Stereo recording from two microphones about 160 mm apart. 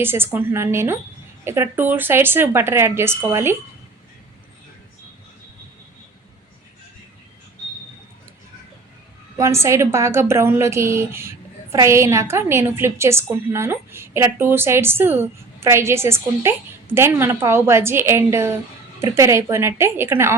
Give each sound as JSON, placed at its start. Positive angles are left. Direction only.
{"t": 0.0, "sound": "a woman's voice", "side_deg": -15}
{"t": 9.4, "sound": "a woman's voice", "side_deg": -15}